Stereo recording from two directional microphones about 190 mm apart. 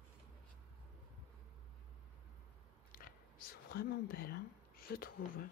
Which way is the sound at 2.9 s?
50° left (ahead or behind).